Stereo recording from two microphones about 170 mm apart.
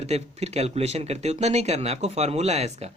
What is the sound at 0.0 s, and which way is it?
Speech, 40° right (ahead or behind).